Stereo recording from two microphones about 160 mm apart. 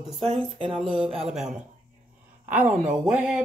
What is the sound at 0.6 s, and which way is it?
Speech, 35° right (ahead or behind).